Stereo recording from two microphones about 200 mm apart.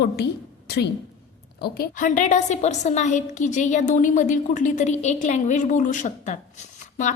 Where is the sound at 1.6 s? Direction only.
45° left (ahead or behind).